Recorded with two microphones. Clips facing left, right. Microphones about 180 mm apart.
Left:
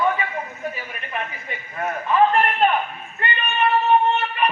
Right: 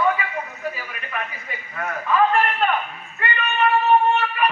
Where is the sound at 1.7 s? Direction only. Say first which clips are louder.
Left 1 dB; 25° left (ahead or behind).